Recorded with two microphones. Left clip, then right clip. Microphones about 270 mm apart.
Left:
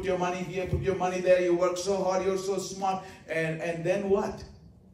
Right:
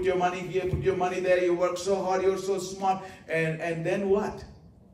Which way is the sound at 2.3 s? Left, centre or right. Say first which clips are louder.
Right 1 dB; left.